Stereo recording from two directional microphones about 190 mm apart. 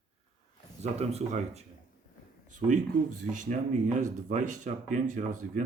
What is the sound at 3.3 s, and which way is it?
Speech, 40° right (ahead or behind).